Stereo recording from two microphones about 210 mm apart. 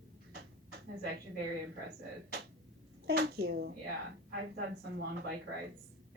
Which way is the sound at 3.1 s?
50° right (ahead or behind).